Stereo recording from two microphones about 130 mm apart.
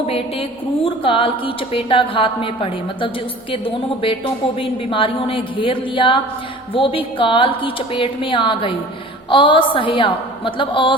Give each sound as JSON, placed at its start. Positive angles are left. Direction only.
{"t": 0.9, "sound": "a woman's voice", "side_deg": 45}